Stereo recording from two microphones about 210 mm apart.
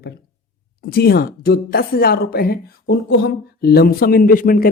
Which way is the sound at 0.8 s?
45° left (ahead or behind).